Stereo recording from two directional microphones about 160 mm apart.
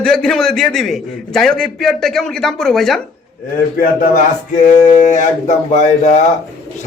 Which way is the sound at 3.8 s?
55° left (ahead or behind).